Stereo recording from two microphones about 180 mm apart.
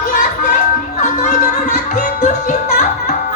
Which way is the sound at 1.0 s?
45° left (ahead or behind).